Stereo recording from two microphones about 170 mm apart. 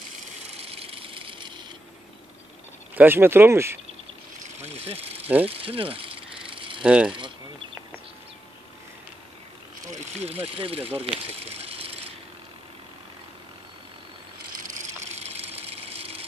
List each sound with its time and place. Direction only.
0.6 s vehicle: 35° right (ahead or behind)
3.0 s speech: 15° right (ahead or behind)
4.4 s vehicle: 40° right (ahead or behind)
5.5 s a sound: 35° right (ahead or behind)
6.8 s speech: 5° right (ahead or behind)
9.8 s speech: 40° right (ahead or behind)
14.6 s a sound: 50° right (ahead or behind)
15.0 s water: 40° right (ahead or behind)